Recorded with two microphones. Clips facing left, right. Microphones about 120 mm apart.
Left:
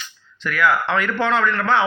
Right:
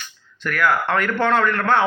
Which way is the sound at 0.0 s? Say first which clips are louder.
Even; 50° right (ahead or behind).